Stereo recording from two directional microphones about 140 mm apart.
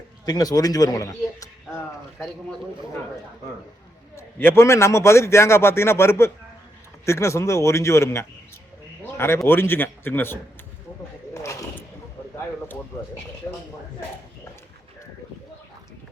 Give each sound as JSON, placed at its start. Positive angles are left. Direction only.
{"t": 0.3, "sound": "a man's voice", "side_deg": 25}
{"t": 4.1, "sound": "a man's voice", "side_deg": 15}
{"t": 13.4, "sound": "a man's voice", "side_deg": 25}